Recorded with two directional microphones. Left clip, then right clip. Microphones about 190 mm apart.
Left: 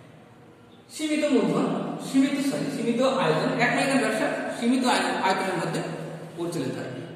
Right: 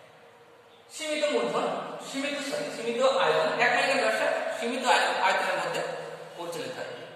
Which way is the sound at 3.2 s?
35° right (ahead or behind).